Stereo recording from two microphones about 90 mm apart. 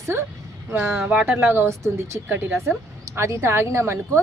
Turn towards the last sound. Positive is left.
turn(degrees=-30)  # may be behind; listen again after turning